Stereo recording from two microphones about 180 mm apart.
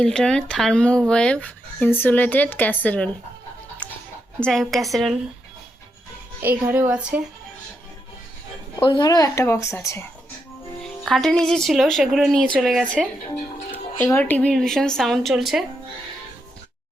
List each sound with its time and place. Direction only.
0.0 s speech: 5° left (ahead or behind)
4.4 s a woman's voice: 5° left (ahead or behind)
6.4 s speech: 10° right (ahead or behind)
8.8 s speech: 25° left (ahead or behind)
10.8 s a woman's voice: centre (ahead or behind)
14.0 s a woman's voice: 10° left (ahead or behind)